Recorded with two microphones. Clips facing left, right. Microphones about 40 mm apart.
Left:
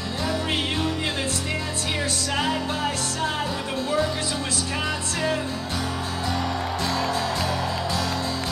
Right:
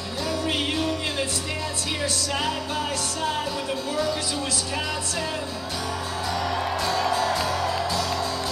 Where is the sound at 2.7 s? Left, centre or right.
Left.